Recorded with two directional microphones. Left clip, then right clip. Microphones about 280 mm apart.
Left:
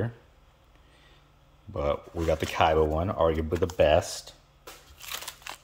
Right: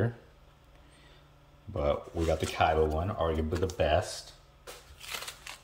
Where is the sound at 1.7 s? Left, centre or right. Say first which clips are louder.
Left 1 dB; centre.